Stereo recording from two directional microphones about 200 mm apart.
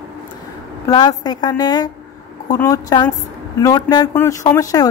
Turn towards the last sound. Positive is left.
turn(degrees=15)  # may be behind; listen again after turning